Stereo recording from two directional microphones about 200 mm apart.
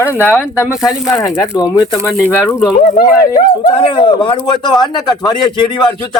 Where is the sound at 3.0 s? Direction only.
20° left (ahead or behind).